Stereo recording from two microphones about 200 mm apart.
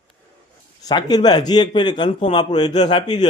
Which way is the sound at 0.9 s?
20° left (ahead or behind).